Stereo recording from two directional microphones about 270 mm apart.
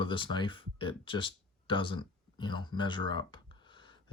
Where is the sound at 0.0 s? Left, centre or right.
Centre.